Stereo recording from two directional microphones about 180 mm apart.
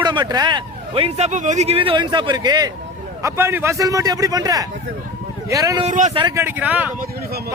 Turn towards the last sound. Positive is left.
turn(degrees=-10)  # may be behind; listen again after turning